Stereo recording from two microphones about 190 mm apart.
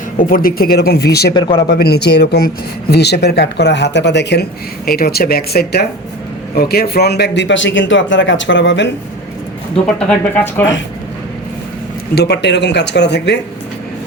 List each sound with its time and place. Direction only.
0.2 s speech: 45° left (ahead or behind)
1.3 s speech: 25° left (ahead or behind)
1.6 s a man's voice: 60° left (ahead or behind)
9.8 s speech: 5° left (ahead or behind)
12.1 s speech: 60° left (ahead or behind)